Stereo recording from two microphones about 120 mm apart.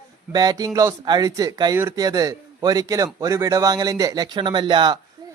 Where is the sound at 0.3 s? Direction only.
35° right (ahead or behind).